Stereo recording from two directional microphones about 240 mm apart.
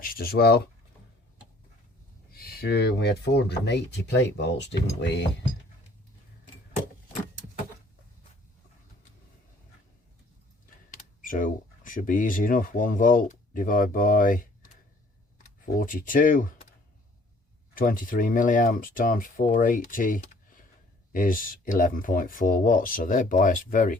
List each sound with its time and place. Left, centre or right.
0.0 s speech: left
2.3 s speech: left
10.9 s speech: left
15.6 s speech: left
17.7 s speech: left